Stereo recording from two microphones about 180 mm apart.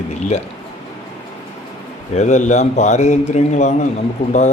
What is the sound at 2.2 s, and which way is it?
A man's voice, 40° left (ahead or behind).